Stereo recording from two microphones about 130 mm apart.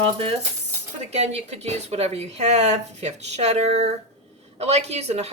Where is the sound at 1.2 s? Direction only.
55° right (ahead or behind).